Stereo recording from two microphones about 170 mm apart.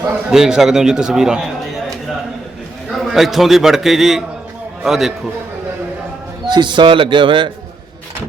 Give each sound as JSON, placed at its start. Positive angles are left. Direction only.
{"t": 0.3, "sound": "a man's voice", "side_deg": -5}
{"t": 2.9, "sound": "a man's voice", "side_deg": 0}
{"t": 6.5, "sound": "a man's voice", "side_deg": -25}